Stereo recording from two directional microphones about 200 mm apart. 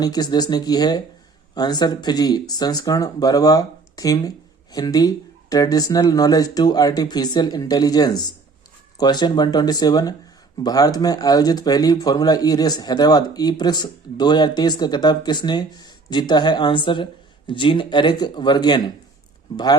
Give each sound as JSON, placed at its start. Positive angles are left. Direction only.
{"t": 0.0, "sound": "speech", "side_deg": 20}